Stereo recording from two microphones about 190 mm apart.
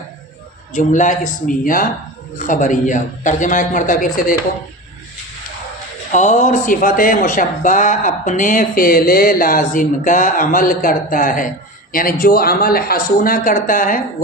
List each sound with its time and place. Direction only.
0.7 s speech: 40° left (ahead or behind)
6.1 s speech: 40° left (ahead or behind)